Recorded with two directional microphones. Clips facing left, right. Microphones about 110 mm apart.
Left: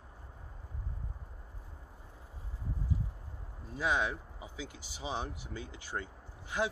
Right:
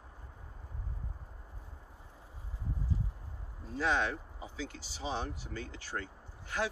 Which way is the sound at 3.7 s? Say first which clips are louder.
Right 1 dB; 10° left (ahead or behind).